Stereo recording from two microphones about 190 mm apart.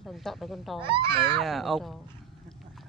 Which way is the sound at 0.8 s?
25° right (ahead or behind).